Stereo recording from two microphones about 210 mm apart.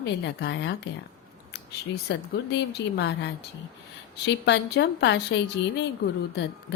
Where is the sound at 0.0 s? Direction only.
55° left (ahead or behind).